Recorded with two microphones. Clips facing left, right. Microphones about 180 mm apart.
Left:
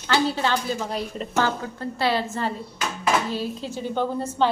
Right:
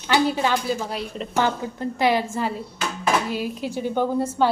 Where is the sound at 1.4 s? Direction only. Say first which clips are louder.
Right 2 dB; 15° right (ahead or behind).